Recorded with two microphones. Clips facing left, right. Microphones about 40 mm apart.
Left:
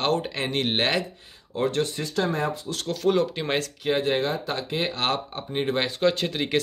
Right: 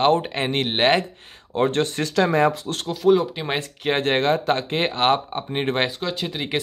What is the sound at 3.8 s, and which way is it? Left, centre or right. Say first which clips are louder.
Speech: right 5 dB; right.